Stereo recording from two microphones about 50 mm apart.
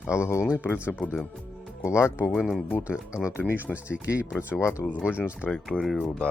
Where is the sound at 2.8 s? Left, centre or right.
Centre.